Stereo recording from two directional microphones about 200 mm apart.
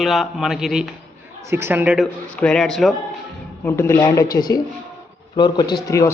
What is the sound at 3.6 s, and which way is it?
A man's voice, 10° left (ahead or behind).